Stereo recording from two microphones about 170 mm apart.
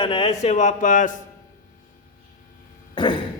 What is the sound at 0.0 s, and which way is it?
Speech, 30° left (ahead or behind).